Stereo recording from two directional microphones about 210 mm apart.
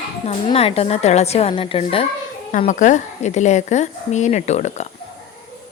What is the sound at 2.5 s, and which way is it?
A woman's voice, 35° left (ahead or behind).